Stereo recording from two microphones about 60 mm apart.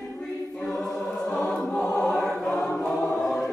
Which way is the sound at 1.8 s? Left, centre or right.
Centre.